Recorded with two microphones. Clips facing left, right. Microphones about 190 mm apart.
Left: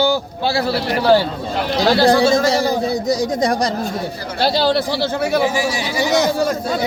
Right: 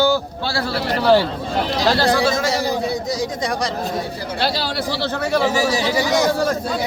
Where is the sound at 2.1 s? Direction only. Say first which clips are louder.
Left 5 dB; 30° left (ahead or behind).